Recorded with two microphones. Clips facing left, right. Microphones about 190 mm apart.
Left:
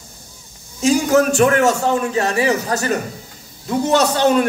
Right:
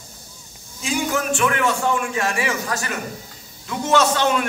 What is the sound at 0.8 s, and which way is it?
A man's voice, 40° left (ahead or behind).